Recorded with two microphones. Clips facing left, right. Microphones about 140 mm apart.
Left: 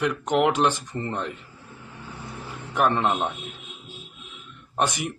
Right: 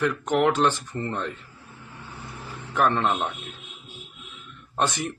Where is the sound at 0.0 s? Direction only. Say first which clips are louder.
Even; 15° left (ahead or behind).